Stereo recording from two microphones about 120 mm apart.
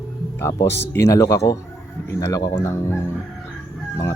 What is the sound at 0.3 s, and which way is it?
Speech, 25° left (ahead or behind).